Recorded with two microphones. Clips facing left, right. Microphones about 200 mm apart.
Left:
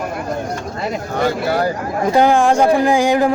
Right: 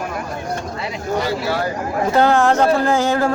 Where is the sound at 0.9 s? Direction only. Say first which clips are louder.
Left 3 dB; 50° left (ahead or behind).